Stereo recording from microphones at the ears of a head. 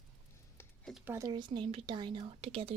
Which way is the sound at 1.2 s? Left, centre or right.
Right.